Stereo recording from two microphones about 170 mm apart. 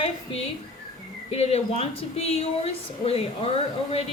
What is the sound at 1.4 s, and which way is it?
Speech, 40° left (ahead or behind).